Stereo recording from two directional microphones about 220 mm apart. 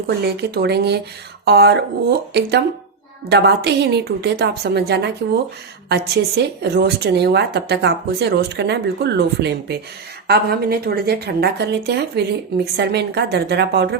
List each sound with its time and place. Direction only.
0.3 s a woman's voice: 50° right (ahead or behind)